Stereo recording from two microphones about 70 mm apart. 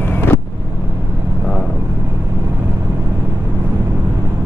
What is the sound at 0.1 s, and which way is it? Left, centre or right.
Vehicle, left.